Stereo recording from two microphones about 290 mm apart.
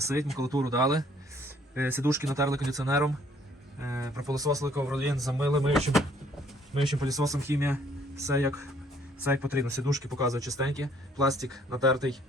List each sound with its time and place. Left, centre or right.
0.0 s speech: centre
7.0 s speech: centre